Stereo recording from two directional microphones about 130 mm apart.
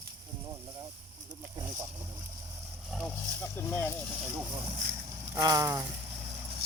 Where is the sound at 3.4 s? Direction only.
20° left (ahead or behind).